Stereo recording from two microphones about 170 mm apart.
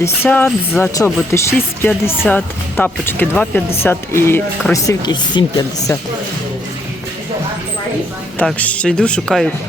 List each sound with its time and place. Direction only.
0.0 s speech: 10° left (ahead or behind)
8.4 s speech: 10° left (ahead or behind)